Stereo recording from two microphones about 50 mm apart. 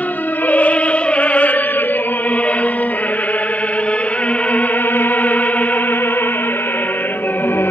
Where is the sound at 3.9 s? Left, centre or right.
Left.